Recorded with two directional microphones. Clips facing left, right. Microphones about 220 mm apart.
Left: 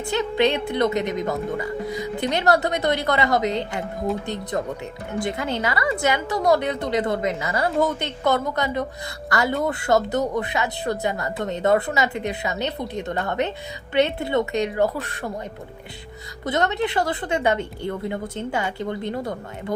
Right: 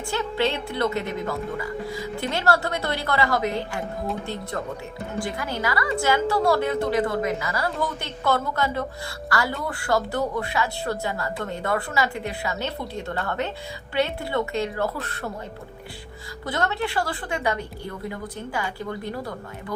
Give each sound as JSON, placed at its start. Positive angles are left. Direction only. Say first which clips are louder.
{"t": 0.0, "sound": "a woman's voice", "louder": "left 4 dB", "side_deg": 20}
{"t": 16.5, "sound": "a woman's voice", "louder": "left 4 dB", "side_deg": 20}